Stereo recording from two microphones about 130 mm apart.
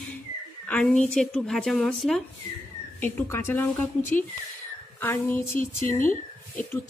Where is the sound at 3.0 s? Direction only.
15° left (ahead or behind).